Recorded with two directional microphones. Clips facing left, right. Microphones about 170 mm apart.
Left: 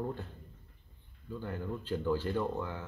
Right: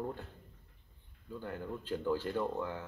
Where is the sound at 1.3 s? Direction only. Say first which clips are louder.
Left 2 dB; 5° right (ahead or behind).